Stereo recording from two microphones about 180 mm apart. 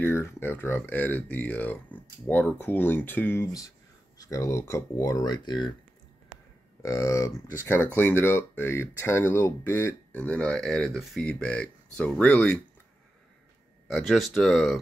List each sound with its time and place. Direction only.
0.0 s speech: 15° left (ahead or behind)
6.8 s speech: 20° left (ahead or behind)
13.8 s speech: centre (ahead or behind)